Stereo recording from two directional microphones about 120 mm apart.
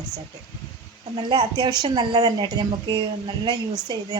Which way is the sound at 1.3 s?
35° right (ahead or behind).